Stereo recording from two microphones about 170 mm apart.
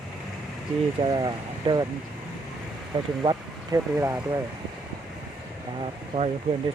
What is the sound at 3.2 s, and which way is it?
Speech, 20° right (ahead or behind).